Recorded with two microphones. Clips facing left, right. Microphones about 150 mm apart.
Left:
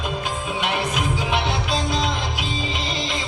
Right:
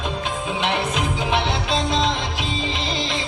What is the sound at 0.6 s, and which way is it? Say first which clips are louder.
Music: right 1 dB; 25° right (ahead or behind).